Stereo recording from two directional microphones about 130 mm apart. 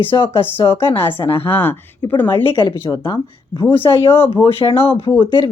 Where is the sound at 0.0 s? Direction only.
40° left (ahead or behind).